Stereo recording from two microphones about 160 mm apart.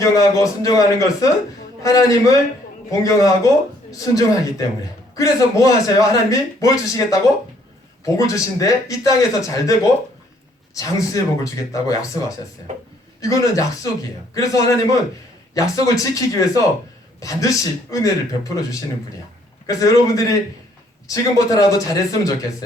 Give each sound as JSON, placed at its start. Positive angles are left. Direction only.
{"t": 0.0, "sound": "speech", "side_deg": 20}
{"t": 13.2, "sound": "speech", "side_deg": 20}